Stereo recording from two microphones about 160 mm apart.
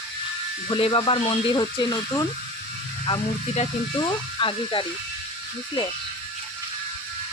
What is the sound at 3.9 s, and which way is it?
Speech, 30° left (ahead or behind).